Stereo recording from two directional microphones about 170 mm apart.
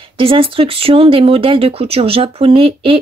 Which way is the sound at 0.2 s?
30° right (ahead or behind).